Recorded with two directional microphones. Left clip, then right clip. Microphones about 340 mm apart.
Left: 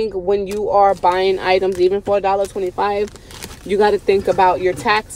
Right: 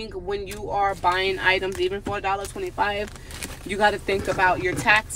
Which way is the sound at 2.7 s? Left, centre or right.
Centre.